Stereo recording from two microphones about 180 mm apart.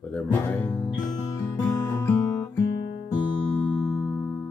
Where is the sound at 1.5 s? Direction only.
15° left (ahead or behind).